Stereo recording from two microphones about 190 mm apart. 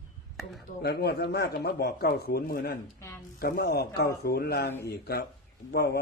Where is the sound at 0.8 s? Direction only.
60° left (ahead or behind).